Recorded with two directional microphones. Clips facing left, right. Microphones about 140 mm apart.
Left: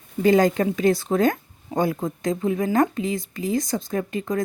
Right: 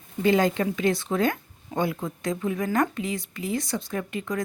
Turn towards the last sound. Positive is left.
turn(degrees=35)  # may be behind; listen again after turning